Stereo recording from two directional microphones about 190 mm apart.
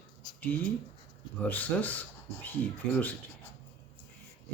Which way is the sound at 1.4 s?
10° left (ahead or behind).